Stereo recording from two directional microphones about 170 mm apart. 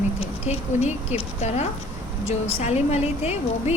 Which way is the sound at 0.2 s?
40° left (ahead or behind).